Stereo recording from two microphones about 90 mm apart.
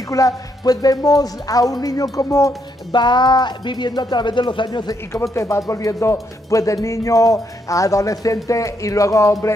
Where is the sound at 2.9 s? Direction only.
55° left (ahead or behind).